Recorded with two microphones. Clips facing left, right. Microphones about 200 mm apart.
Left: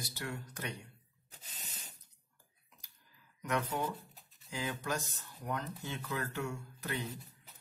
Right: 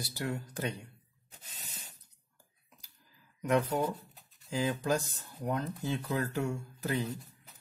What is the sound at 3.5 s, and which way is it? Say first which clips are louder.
Speech: right 6 dB; 30° right (ahead or behind).